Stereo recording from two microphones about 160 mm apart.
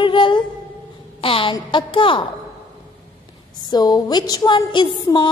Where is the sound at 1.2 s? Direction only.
35° left (ahead or behind).